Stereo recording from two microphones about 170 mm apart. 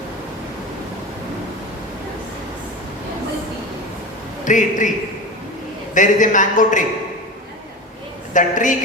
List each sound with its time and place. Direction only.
4.4 s a man's voice: 50° left (ahead or behind)
5.9 s a man's voice: 50° left (ahead or behind)
8.3 s a woman's voice: 50° left (ahead or behind)